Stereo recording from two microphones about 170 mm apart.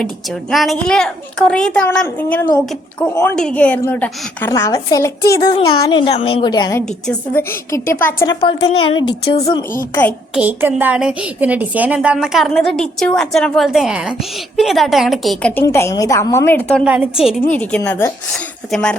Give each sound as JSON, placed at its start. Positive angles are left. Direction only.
{"t": 0.0, "sound": "a woman's voice", "side_deg": 0}
{"t": 8.3, "sound": "a woman's voice", "side_deg": 30}
{"t": 9.9, "sound": "a woman's voice", "side_deg": 10}
{"t": 10.3, "sound": "a woman's voice", "side_deg": -10}
{"t": 16.8, "sound": "a woman's voice", "side_deg": -5}
{"t": 17.5, "sound": "a woman's voice", "side_deg": 10}